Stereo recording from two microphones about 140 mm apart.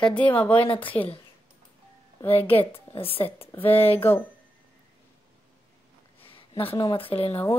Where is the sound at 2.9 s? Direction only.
40° left (ahead or behind).